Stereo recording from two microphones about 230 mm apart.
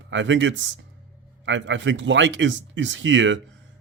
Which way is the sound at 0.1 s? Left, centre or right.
Right.